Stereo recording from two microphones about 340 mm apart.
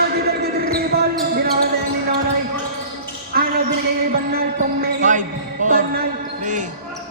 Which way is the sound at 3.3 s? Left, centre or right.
Right.